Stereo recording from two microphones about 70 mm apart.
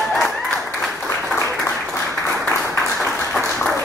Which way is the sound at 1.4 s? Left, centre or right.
Left.